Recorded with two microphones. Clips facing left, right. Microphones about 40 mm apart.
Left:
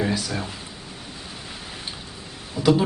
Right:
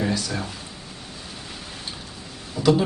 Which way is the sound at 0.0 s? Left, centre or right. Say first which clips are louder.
Even; centre.